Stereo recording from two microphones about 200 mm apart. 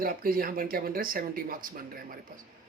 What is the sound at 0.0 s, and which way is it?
Speech, 45° right (ahead or behind).